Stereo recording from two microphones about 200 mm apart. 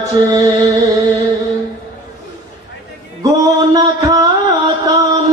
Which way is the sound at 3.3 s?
15° right (ahead or behind).